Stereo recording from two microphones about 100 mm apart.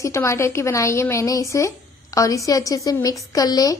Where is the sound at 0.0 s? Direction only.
30° left (ahead or behind).